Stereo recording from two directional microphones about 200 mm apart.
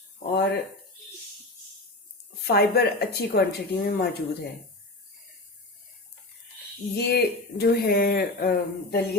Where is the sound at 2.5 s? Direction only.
55° left (ahead or behind).